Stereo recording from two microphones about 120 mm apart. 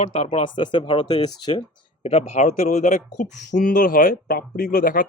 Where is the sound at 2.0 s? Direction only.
60° left (ahead or behind); by 3.0 s 80° left.